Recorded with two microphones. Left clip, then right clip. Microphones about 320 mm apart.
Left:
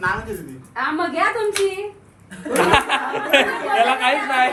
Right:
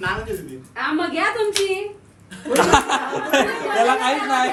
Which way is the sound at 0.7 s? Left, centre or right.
Centre.